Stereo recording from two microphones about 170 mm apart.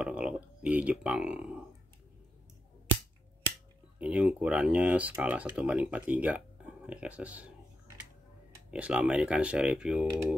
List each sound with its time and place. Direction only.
0.0 s speech: 5° right (ahead or behind)
4.0 s speech: 5° right (ahead or behind)
8.6 s speech: 5° right (ahead or behind)